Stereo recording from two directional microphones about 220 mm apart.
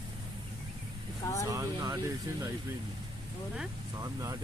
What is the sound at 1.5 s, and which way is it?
Speech, 15° right (ahead or behind).